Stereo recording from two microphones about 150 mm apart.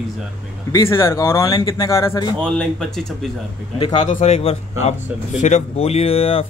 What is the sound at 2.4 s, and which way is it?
Speech, 5° left (ahead or behind).